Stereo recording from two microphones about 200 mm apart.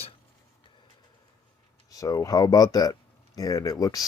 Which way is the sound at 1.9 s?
15° left (ahead or behind).